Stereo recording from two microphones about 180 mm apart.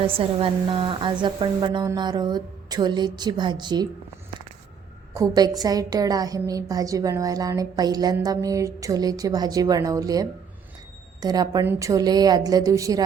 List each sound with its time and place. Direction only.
0.1 s a woman's voice: 30° right (ahead or behind)
5.1 s a woman's voice: 20° right (ahead or behind)